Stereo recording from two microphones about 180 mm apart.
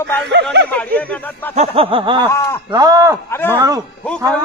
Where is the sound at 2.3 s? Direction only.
15° left (ahead or behind).